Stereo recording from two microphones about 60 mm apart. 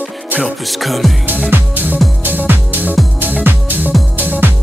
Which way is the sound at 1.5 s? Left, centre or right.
Right.